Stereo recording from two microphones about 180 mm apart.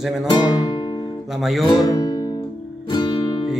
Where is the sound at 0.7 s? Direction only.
25° left (ahead or behind).